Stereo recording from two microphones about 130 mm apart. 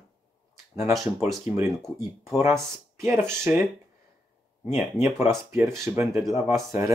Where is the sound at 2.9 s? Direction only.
20° right (ahead or behind).